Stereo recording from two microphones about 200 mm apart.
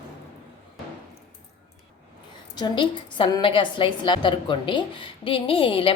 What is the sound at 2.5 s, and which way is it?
A woman's voice, 20° left (ahead or behind).